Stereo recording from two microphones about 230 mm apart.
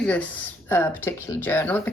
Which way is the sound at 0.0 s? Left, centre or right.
Centre.